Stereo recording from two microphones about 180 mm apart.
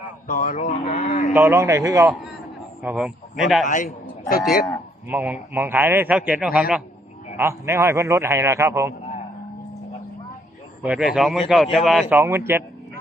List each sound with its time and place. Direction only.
0.3 s speech: 45° left (ahead or behind)
1.3 s a man's voice: 10° right (ahead or behind)
2.8 s speech: 5° right (ahead or behind)
3.7 s a man's voice: 50° left (ahead or behind)
5.0 s a man's voice: 10° right (ahead or behind)
10.8 s a man's voice: 5° right (ahead or behind)